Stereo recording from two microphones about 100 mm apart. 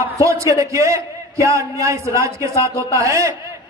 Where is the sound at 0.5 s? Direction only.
30° right (ahead or behind).